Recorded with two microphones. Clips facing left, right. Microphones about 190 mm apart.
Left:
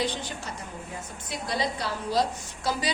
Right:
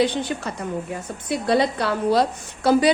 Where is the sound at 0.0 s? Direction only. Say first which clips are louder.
Right 9 dB; 60° right (ahead or behind).